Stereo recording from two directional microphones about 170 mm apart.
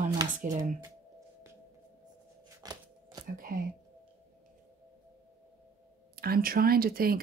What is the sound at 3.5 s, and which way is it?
Speech, 55° right (ahead or behind).